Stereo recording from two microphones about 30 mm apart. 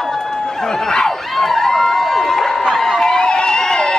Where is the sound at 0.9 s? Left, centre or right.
Left.